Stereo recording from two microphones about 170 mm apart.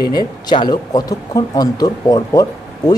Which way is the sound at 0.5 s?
25° left (ahead or behind).